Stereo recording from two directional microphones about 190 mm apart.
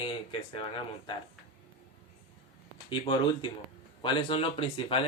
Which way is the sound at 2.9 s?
25° left (ahead or behind).